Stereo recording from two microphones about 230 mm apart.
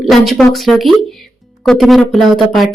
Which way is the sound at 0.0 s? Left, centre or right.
Centre.